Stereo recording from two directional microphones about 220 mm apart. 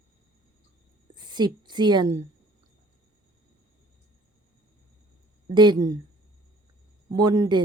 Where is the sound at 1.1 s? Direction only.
20° right (ahead or behind).